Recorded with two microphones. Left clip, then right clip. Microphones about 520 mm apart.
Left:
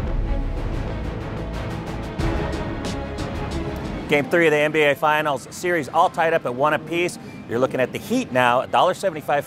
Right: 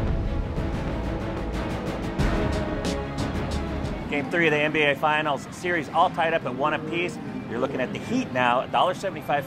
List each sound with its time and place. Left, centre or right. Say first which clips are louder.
2.1 s music: left 2 dB; centre
4.1 s speech: left 6 dB; left